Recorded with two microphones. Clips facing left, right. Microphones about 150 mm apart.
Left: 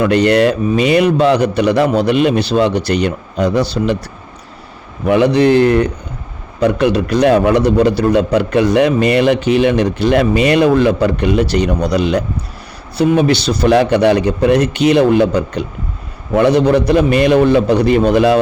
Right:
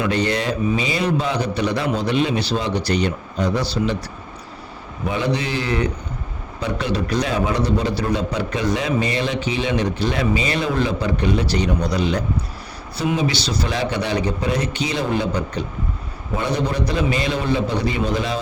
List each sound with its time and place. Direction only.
0.0 s a man's voice: 65° left (ahead or behind)
5.0 s a man's voice: 70° left (ahead or behind)
16.3 s a man's voice: 90° left; by 18.3 s 70° left (ahead or behind)